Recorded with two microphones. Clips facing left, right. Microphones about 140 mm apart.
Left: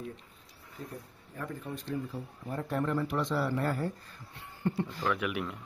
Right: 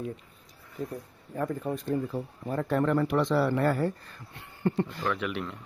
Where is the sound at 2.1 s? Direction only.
90° right.